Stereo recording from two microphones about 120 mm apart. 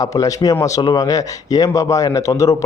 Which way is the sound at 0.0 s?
30° left (ahead or behind).